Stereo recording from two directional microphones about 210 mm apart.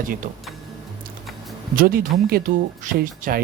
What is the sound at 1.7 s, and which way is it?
Speech, 40° right (ahead or behind).